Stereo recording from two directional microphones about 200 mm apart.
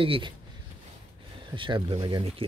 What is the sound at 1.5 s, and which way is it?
Speech, 25° right (ahead or behind).